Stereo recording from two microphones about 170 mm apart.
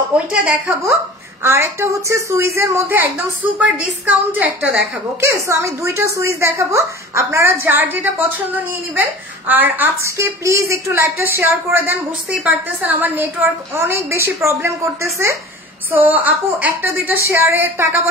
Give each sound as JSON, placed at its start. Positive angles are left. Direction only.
{"t": 0.3, "sound": "a woman's voice", "side_deg": -5}